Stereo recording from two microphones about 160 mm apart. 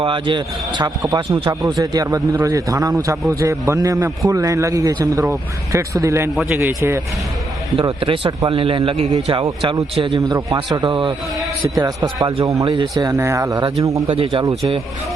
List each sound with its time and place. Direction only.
0.0 s a man's voice: 30° right (ahead or behind); by 7.0 s 15° right (ahead or behind)
7.8 s a man's voice: 35° right (ahead or behind)
13.0 s a man's voice: 20° right (ahead or behind)
14.1 s a man's voice: 35° right (ahead or behind)